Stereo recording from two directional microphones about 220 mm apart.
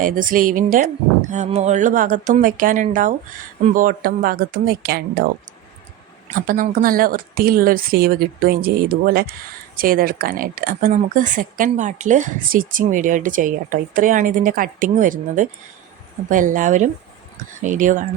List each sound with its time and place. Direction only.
0.0 s speech: 40° right (ahead or behind)
6.3 s speech: 40° right (ahead or behind)